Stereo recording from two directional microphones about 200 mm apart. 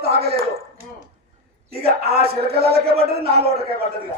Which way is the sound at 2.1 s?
50° right (ahead or behind).